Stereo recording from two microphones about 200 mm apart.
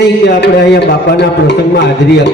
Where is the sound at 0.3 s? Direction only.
55° left (ahead or behind).